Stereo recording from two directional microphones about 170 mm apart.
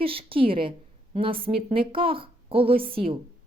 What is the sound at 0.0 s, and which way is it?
A woman's voice, 35° right (ahead or behind).